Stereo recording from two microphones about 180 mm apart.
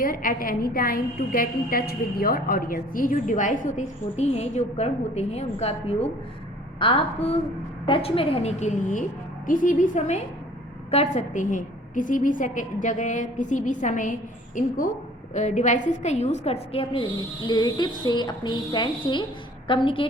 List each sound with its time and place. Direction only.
0.0 s a woman's voice: 50° left (ahead or behind)
15.3 s a woman's voice: 40° left (ahead or behind)